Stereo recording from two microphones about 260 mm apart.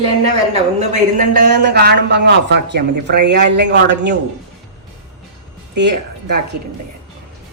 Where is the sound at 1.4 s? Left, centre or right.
Right.